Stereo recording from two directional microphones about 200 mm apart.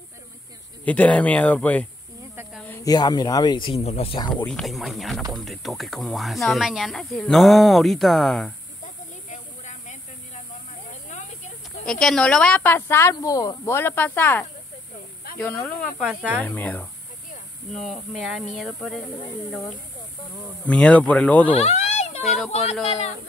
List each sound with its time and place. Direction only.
0.8 s speech: 5° left (ahead or behind)
4.5 s speech: centre (ahead or behind)
9.3 s a sound: 35° left (ahead or behind)
11.8 s speech: 5° left (ahead or behind)
16.4 s speech: 10° left (ahead or behind)
18.6 s speech: centre (ahead or behind)
20.6 s speech: 5° left (ahead or behind)
21.5 s a sound: 35° left (ahead or behind)
22.7 s speech: 35° left (ahead or behind)